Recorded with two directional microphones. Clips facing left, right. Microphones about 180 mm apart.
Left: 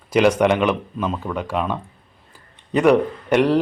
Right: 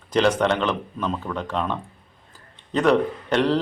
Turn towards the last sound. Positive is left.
turn(degrees=10)  # may be behind; listen again after turning